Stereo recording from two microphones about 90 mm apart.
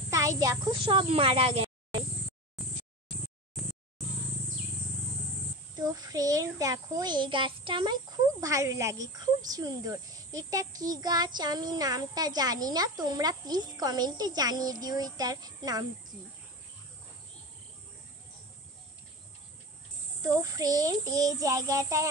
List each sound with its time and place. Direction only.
0.1 s a sound: 40° right (ahead or behind)
0.7 s speech: 70° right (ahead or behind); by 1.7 s 90° right
3.6 s a sound: centre (ahead or behind)
5.8 s speech: 45° right (ahead or behind); by 8.0 s 60° right (ahead or behind)
8.4 s speech: 40° right (ahead or behind)
20.2 s child singing: 40° right (ahead or behind)